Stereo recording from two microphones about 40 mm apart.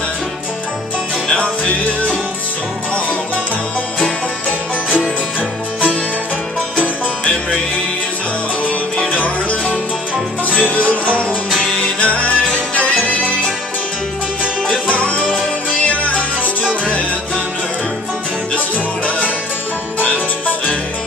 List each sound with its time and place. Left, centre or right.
1.3 s music: left
9.1 s music: left
19.0 s music: left